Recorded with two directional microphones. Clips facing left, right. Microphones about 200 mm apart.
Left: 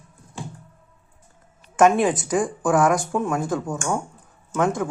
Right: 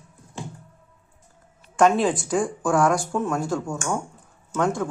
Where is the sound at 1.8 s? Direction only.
15° left (ahead or behind).